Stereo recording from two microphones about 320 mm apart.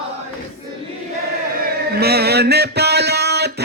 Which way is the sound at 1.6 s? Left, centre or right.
Right.